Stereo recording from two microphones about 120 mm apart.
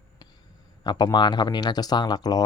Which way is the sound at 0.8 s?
35° left (ahead or behind).